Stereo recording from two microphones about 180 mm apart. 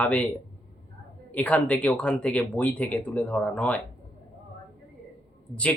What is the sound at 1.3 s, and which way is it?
Speech, 10° left (ahead or behind).